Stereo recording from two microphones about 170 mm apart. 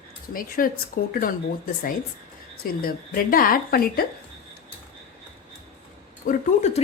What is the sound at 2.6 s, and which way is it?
A woman's voice, 60° left (ahead or behind).